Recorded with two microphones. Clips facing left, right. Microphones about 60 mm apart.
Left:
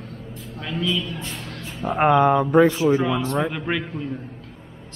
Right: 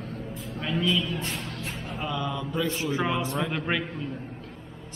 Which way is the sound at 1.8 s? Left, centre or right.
Left.